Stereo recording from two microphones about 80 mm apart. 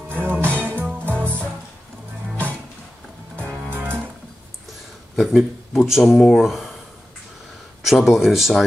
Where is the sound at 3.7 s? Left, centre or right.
Right.